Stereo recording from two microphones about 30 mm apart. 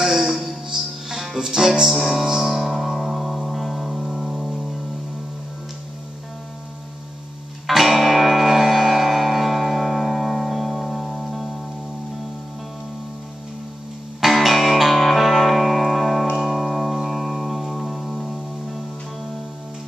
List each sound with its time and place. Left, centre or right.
0.0 s music: centre
1.9 s music: centre
7.6 s music: centre
14.2 s music: centre
17.1 s music: centre